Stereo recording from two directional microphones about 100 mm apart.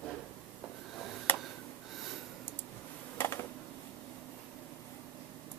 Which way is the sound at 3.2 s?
25° left (ahead or behind).